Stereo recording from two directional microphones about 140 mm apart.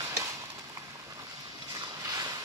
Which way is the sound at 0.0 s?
20° right (ahead or behind).